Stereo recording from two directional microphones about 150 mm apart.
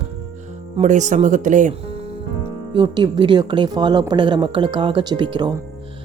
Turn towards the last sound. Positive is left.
turn(degrees=-30)  # may be behind; listen again after turning